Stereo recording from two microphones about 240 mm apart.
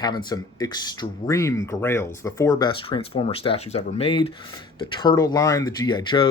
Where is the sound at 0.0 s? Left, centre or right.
Centre.